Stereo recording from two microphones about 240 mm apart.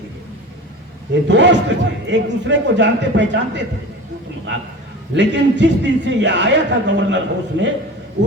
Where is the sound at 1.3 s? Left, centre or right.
Right.